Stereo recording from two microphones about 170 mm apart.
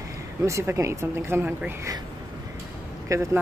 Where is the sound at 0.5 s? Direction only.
15° right (ahead or behind).